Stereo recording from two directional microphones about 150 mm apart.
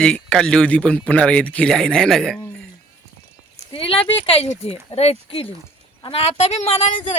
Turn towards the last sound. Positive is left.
turn(degrees=45)  # may be behind; listen again after turning